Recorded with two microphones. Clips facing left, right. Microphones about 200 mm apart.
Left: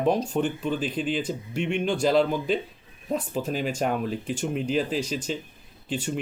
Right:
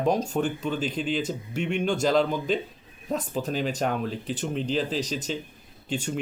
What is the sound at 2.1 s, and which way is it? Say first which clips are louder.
Speech: left 2 dB; 5° left (ahead or behind).